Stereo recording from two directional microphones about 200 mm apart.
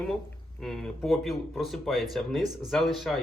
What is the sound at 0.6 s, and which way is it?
Speech, centre (ahead or behind).